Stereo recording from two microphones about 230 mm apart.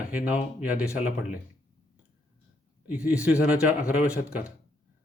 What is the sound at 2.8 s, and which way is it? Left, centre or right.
Speech, centre.